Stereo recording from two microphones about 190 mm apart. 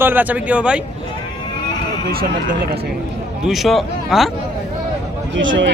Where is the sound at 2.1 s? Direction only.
50° right (ahead or behind).